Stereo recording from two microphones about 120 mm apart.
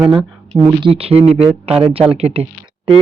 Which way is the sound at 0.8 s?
50° right (ahead or behind).